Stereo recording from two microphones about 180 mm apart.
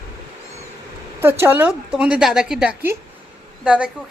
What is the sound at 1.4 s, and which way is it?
A woman's voice, 10° right (ahead or behind).